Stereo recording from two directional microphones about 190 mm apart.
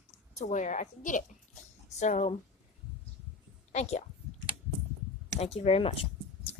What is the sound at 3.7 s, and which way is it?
Speech, 35° left (ahead or behind).